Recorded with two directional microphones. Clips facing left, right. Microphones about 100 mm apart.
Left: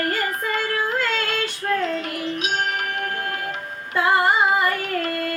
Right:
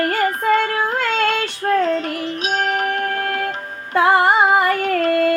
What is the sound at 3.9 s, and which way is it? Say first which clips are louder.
Female singing: right 5 dB; 55° right (ahead or behind).